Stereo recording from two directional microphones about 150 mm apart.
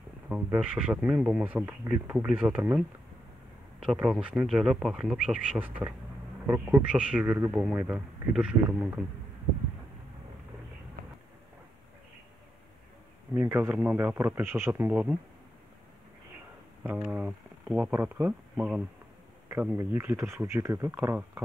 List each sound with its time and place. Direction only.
0.3 s speech: 10° right (ahead or behind)
3.8 s speech: 5° right (ahead or behind)
13.3 s speech: 15° right (ahead or behind)
16.8 s speech: 10° right (ahead or behind)